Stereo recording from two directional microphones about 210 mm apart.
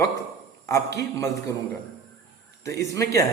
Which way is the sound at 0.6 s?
15° left (ahead or behind).